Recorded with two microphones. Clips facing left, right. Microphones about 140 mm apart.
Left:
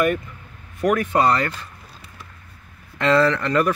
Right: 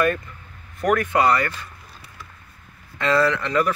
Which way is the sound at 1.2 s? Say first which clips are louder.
Left 1 dB; 25° left (ahead or behind).